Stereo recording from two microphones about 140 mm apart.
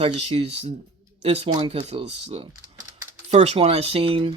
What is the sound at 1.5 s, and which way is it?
Speech, 35° right (ahead or behind).